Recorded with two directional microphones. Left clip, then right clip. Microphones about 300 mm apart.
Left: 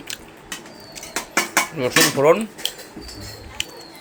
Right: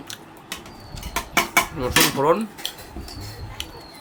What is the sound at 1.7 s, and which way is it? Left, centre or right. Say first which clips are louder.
Speech: left 2 dB; centre.